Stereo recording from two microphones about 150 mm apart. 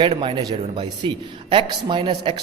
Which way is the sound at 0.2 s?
40° right (ahead or behind).